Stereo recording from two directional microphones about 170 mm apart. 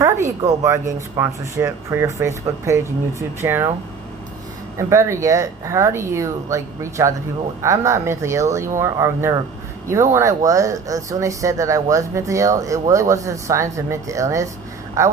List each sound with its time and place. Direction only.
0.0 s speech: 20° right (ahead or behind)
4.8 s speech: 15° right (ahead or behind)